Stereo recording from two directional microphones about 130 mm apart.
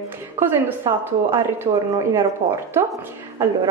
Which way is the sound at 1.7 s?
35° right (ahead or behind).